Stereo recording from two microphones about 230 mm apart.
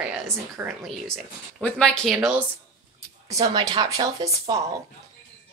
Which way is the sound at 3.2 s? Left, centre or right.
Centre.